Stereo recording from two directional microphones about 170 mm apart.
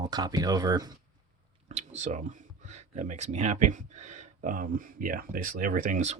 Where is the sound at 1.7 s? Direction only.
40° right (ahead or behind).